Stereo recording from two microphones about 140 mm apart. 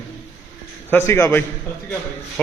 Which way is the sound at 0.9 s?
15° left (ahead or behind).